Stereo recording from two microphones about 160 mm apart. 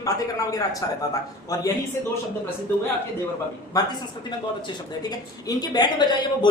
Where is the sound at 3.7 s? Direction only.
25° left (ahead or behind).